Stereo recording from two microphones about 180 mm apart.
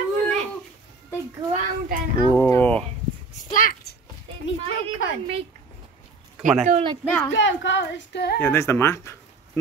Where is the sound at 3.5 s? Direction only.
50° left (ahead or behind).